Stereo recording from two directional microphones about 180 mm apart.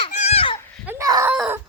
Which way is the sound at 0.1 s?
40° left (ahead or behind).